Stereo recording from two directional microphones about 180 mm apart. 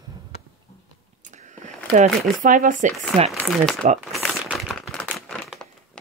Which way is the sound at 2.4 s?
50° right (ahead or behind).